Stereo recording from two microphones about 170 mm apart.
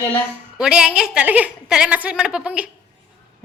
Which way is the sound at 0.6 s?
5° right (ahead or behind).